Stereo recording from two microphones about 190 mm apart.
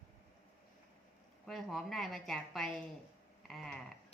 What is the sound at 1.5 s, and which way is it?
A woman's voice, centre (ahead or behind).